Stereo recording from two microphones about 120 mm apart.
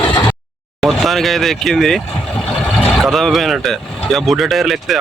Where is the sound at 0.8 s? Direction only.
Centre (ahead or behind).